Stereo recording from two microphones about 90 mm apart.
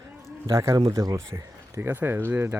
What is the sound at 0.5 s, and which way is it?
Speech, 35° right (ahead or behind).